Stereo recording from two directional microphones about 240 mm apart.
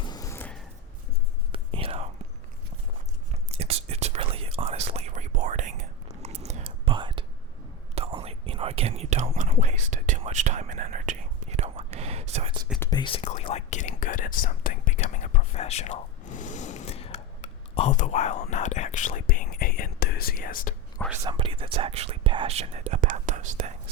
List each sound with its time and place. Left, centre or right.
0.0 s a sound: centre
1.5 s whispering: right
3.5 s whispering: right
12.8 s whispering: centre; by 20.7 s left
21.2 s whispering: right